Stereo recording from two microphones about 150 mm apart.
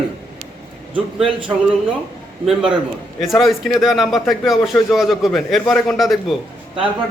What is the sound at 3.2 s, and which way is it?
A man's voice, centre (ahead or behind).